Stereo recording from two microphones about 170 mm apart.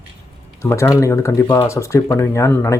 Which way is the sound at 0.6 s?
15° left (ahead or behind).